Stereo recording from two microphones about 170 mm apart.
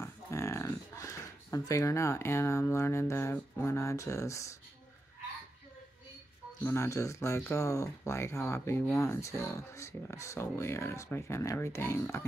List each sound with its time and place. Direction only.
0.0 s speech: 15° left (ahead or behind)
6.6 s speech: 15° left (ahead or behind)